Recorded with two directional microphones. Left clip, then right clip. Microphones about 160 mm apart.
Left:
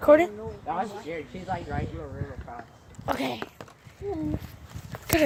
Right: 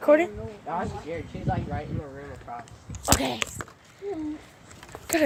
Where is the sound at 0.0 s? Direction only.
15° left (ahead or behind).